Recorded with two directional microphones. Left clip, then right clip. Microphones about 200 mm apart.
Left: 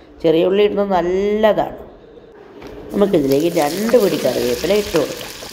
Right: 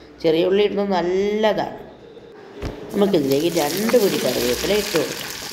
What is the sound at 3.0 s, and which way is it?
Speech, 30° left (ahead or behind).